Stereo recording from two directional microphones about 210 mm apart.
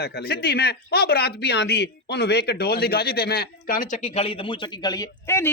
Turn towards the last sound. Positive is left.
turn(degrees=15)  # may be behind; listen again after turning